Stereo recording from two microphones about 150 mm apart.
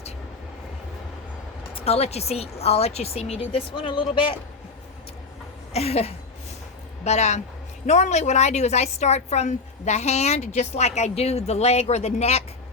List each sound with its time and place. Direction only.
1.7 s a woman's voice: 40° left (ahead or behind)
5.7 s a sound: 45° left (ahead or behind)
7.0 s a woman's voice: 50° left (ahead or behind)